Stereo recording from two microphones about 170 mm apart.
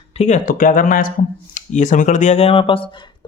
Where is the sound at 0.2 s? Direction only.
45° left (ahead or behind).